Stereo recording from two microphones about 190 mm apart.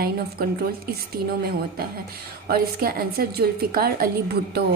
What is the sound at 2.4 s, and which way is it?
A woman's voice, 55° right (ahead or behind).